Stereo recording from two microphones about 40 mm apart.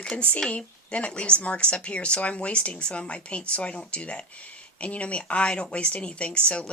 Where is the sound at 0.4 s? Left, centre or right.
Left.